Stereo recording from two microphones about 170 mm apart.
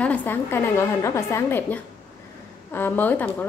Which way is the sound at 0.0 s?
10° left (ahead or behind).